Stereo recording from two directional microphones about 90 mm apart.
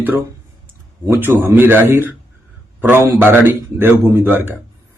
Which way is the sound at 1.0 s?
25° right (ahead or behind).